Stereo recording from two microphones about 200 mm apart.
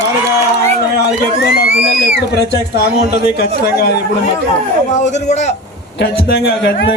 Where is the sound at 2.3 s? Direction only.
55° left (ahead or behind).